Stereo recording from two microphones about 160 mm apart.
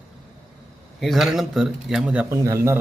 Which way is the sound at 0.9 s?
Centre (ahead or behind).